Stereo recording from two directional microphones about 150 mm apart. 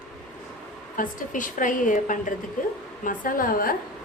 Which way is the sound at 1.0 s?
60° left (ahead or behind).